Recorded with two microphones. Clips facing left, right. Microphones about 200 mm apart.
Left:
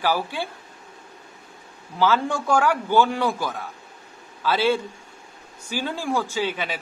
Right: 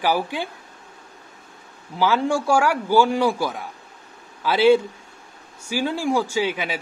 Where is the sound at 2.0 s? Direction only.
10° right (ahead or behind).